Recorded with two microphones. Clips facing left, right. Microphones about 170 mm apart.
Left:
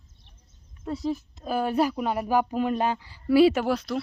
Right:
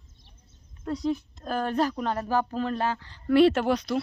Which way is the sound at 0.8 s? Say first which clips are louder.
Right 1 dB; 5° left (ahead or behind).